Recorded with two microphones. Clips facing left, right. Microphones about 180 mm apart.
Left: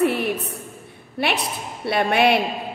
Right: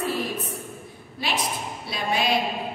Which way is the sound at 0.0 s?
65° left (ahead or behind).